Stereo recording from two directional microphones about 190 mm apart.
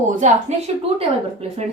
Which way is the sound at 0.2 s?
40° right (ahead or behind).